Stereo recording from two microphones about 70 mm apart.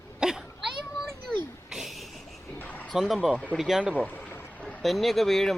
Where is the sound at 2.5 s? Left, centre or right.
Left.